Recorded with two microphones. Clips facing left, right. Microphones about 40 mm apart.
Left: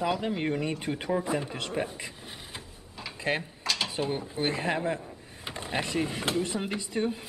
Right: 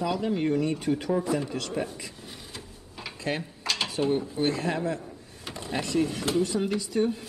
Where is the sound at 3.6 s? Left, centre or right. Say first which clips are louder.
Right 1 dB; centre.